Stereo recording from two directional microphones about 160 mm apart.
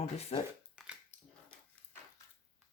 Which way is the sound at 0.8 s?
Centre (ahead or behind).